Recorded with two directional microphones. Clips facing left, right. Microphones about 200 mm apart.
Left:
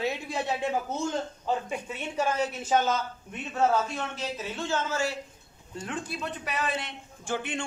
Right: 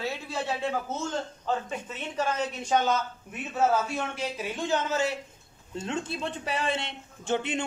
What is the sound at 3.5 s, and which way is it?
A man's voice, 10° right (ahead or behind).